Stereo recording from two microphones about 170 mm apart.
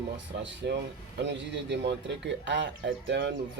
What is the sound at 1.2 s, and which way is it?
A man's voice, 90° right.